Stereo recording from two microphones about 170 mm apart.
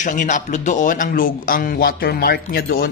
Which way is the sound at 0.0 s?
50° left (ahead or behind).